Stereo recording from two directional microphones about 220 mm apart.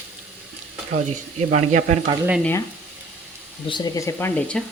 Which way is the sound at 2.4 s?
10° left (ahead or behind).